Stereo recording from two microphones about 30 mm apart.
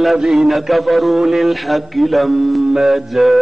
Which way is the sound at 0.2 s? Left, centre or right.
Centre.